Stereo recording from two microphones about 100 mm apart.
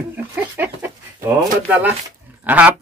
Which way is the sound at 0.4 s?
20° right (ahead or behind).